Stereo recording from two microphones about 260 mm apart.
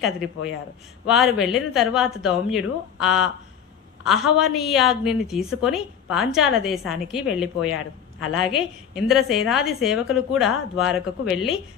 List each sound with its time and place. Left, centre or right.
1.0 s a woman's voice: centre
7.6 s speech: left
8.5 s a woman's voice: centre